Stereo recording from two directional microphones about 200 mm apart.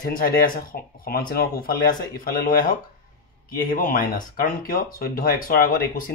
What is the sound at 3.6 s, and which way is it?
Speech, 45° left (ahead or behind).